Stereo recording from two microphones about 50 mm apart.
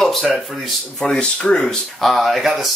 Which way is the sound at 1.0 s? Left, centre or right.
Centre.